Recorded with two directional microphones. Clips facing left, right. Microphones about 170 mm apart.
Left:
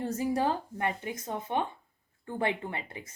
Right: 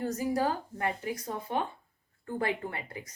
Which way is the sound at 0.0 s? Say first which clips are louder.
Even; 25° left (ahead or behind).